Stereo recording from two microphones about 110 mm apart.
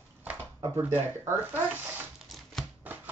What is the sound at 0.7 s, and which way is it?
Speech, 20° right (ahead or behind).